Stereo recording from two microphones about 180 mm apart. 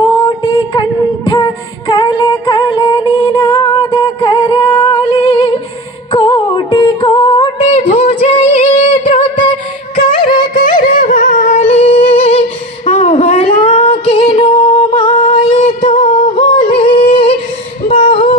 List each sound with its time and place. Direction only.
0.0 s music: 25° left (ahead or behind)
7.8 s a sound: 45° left (ahead or behind)
8.3 s music: 30° left (ahead or behind)
10.5 s music: 45° left (ahead or behind); by 17.3 s 30° left (ahead or behind)
17.9 s singing: 30° left (ahead or behind)